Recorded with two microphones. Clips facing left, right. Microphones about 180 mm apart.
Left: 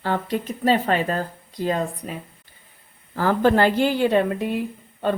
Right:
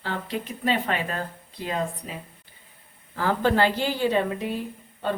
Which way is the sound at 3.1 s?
45° left (ahead or behind).